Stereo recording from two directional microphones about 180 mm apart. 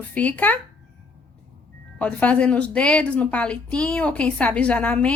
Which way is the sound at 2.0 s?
5° left (ahead or behind).